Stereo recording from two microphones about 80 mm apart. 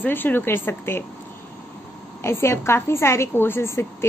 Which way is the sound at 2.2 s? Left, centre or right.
Left.